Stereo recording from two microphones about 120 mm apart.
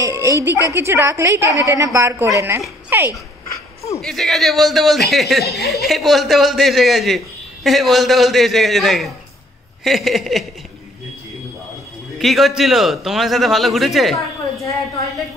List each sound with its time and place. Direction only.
0.0 s a sound: 25° right (ahead or behind)
0.7 s a woman's voice: 20° right (ahead or behind)
4.0 s speech: centre (ahead or behind)
12.2 s speech: centre (ahead or behind)